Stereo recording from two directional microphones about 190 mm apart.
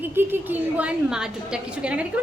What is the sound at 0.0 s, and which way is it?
A woman's voice, 10° right (ahead or behind).